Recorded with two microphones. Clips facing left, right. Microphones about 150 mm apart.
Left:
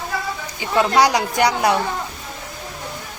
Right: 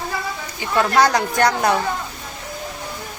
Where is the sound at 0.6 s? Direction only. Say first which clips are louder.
Left 1 dB; 15° left (ahead or behind).